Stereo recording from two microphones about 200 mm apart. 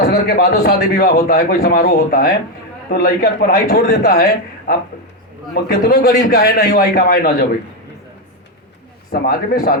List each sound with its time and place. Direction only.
0.1 s a man's voice: 50° left (ahead or behind)
9.2 s a man's voice: 50° left (ahead or behind)